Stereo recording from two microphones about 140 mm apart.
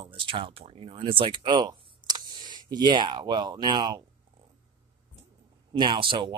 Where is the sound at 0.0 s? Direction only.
40° right (ahead or behind).